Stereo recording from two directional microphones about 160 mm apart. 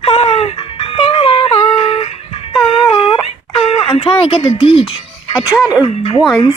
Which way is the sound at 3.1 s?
35° left (ahead or behind).